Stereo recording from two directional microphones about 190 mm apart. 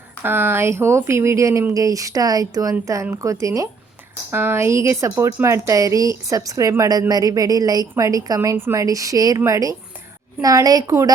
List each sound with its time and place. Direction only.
0.2 s a woman's voice: 10° right (ahead or behind)